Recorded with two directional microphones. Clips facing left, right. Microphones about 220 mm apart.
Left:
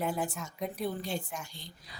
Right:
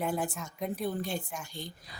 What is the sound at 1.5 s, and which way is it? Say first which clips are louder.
Speech: right 8 dB; 50° right (ahead or behind).